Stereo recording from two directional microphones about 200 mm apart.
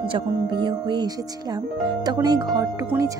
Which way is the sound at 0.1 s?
25° right (ahead or behind).